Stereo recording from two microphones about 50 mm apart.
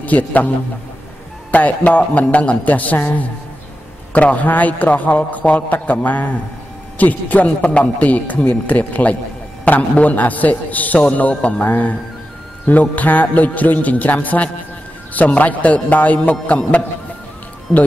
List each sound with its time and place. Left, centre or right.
0.0 s a man's voice: left
1.5 s a man's voice: left
12.9 s a man's voice: left